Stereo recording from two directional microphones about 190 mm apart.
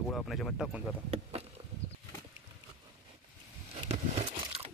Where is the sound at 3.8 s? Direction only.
30° right (ahead or behind).